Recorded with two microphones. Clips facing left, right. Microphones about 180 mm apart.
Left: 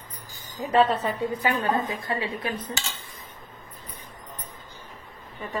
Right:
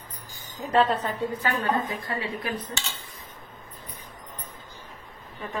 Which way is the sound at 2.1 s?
25° left (ahead or behind).